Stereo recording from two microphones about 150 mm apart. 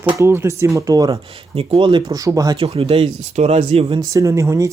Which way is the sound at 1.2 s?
40° right (ahead or behind).